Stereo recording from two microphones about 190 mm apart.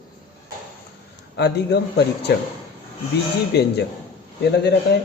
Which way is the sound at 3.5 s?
60° left (ahead or behind).